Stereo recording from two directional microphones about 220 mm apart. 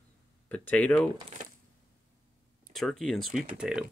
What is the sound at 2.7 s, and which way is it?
Speech, centre (ahead or behind).